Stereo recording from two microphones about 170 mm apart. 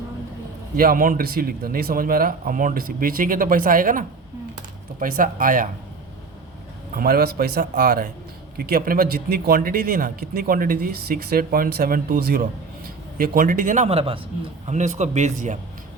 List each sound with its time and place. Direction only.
0.8 s a man's voice: 55° right (ahead or behind)
6.9 s a man's voice: 60° right (ahead or behind); by 15.5 s 45° right (ahead or behind)